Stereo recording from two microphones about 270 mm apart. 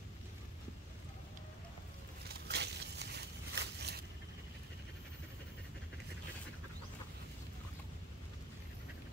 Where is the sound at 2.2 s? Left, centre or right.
Right.